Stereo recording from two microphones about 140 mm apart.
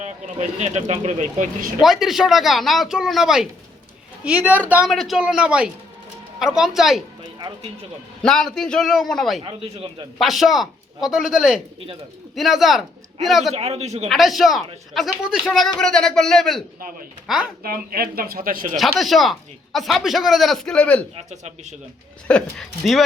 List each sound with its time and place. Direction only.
0.3 s speech: 50° right (ahead or behind)
1.8 s a woman's voice: centre (ahead or behind)
4.9 s speech: centre (ahead or behind)
7.3 s speech: 35° right (ahead or behind)
8.2 s speech: 5° left (ahead or behind)
9.4 s speech: 40° right (ahead or behind)
10.2 s speech: centre (ahead or behind)
13.5 s speech: 50° right (ahead or behind)
14.1 s speech: centre (ahead or behind)
17.4 s speech: 90° right
18.8 s speech: centre (ahead or behind)
21.2 s speech: 55° right (ahead or behind)
22.3 s speech: 5° left (ahead or behind)